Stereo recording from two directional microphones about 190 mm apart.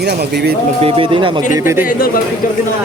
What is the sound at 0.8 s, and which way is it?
Speech, 30° right (ahead or behind).